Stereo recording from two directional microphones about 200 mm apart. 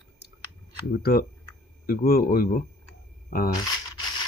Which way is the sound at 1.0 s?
50° left (ahead or behind).